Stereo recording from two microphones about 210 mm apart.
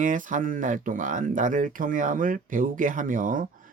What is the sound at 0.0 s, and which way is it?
Speech, 40° right (ahead or behind).